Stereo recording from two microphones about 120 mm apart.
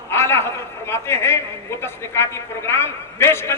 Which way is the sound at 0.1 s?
20° left (ahead or behind).